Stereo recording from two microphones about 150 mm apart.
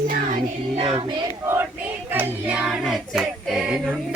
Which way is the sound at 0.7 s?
35° right (ahead or behind).